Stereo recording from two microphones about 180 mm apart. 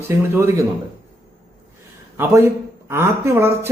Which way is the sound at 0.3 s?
15° right (ahead or behind).